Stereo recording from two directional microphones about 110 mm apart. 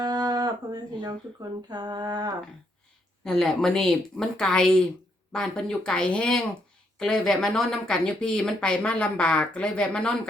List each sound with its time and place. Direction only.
0.0 s speech: 35° right (ahead or behind)
3.2 s a woman's voice: 5° left (ahead or behind)